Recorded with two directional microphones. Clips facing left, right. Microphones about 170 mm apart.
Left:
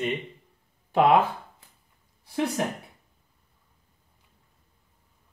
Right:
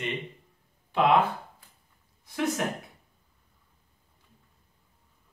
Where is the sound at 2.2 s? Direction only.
30° left (ahead or behind).